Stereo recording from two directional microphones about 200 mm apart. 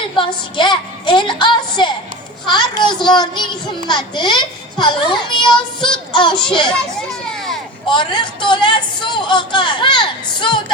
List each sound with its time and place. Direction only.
0.2 s a woman's voice: 25° left (ahead or behind)
6.3 s a child's voice: 5° left (ahead or behind)
7.9 s speech: 25° left (ahead or behind)